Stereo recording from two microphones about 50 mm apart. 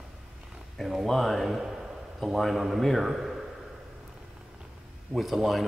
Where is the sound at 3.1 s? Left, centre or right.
Centre.